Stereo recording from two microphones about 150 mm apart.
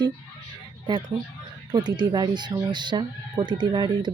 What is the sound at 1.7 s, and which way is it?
Speech, 30° right (ahead or behind).